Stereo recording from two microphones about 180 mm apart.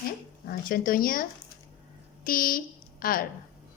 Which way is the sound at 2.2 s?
55° left (ahead or behind).